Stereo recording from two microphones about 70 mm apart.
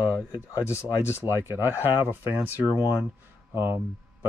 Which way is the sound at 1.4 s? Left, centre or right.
Right.